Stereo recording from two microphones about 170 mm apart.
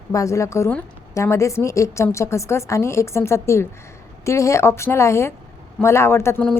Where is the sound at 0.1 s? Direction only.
20° left (ahead or behind).